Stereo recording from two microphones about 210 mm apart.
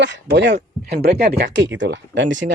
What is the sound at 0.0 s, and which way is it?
Speech, 55° right (ahead or behind).